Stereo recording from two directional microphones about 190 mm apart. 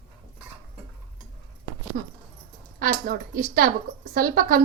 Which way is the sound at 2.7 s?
50° right (ahead or behind).